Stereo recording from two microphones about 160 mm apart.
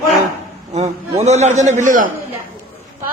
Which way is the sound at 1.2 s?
45° right (ahead or behind).